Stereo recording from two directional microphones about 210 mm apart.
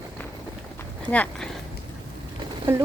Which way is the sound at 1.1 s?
5° left (ahead or behind).